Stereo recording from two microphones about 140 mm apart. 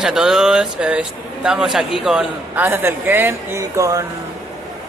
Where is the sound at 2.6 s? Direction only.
15° right (ahead or behind).